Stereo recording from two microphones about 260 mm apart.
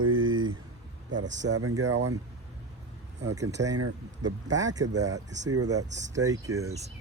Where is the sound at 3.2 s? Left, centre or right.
Centre.